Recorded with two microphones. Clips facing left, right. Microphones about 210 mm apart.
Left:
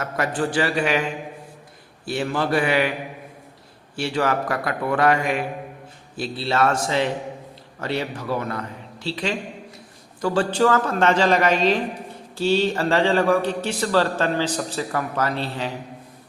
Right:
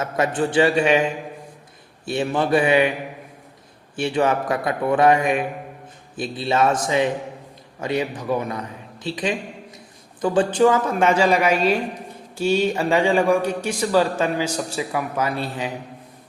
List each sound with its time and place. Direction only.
0.0 s a man's voice: 20° right (ahead or behind)
2.0 s a man's voice: 20° right (ahead or behind)
3.9 s a man's voice: 20° right (ahead or behind)